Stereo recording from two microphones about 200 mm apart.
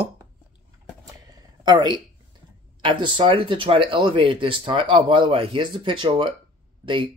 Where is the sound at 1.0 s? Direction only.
20° right (ahead or behind).